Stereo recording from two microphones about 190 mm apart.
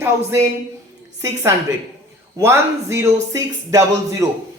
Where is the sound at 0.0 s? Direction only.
10° right (ahead or behind).